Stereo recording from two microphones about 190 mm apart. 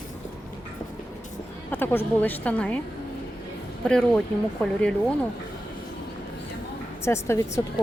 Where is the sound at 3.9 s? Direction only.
5° left (ahead or behind).